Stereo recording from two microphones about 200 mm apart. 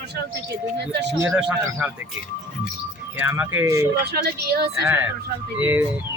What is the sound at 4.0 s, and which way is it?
Speech, 50° right (ahead or behind).